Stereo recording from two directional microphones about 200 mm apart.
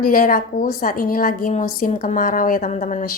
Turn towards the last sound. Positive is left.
turn(degrees=40)  # may be behind; listen again after turning